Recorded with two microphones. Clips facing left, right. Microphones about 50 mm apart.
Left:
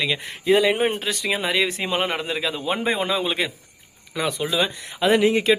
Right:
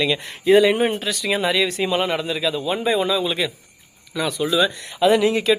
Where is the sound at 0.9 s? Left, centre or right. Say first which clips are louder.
Right 2 dB; left.